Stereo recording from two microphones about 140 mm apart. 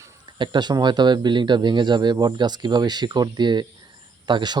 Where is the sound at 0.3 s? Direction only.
35° right (ahead or behind).